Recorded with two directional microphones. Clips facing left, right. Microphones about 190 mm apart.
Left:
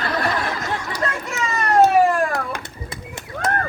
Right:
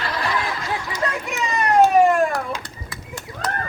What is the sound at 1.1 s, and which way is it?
Children playing, 15° right (ahead or behind).